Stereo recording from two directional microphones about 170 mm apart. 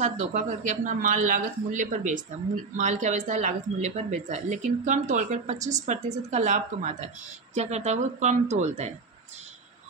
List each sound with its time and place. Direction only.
0.0 s a woman's voice: 45° right (ahead or behind)